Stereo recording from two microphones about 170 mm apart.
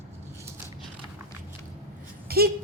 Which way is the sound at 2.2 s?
60° right (ahead or behind).